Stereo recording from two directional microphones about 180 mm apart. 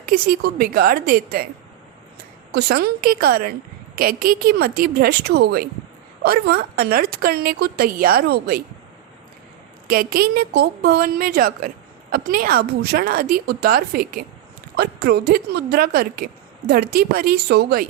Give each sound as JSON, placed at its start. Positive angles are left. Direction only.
{"t": 0.0, "sound": "a woman's voice", "side_deg": -55}
{"t": 2.5, "sound": "a woman's voice", "side_deg": -65}
{"t": 9.8, "sound": "a woman's voice", "side_deg": -55}